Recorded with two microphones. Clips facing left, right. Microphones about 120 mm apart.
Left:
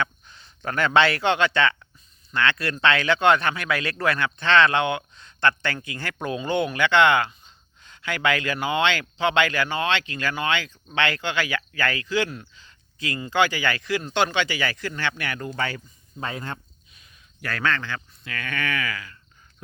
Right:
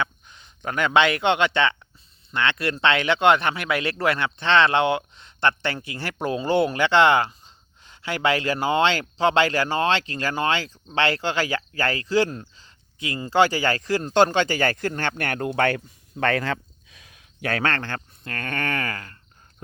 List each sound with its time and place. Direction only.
0.0 s a man's voice: 15° right (ahead or behind); by 12.7 s 35° right (ahead or behind)
13.0 s speech: 25° right (ahead or behind)
13.2 s speech: 35° right (ahead or behind); by 15.8 s 60° right (ahead or behind)
16.2 s speech: 80° right; by 19.6 s 50° right (ahead or behind)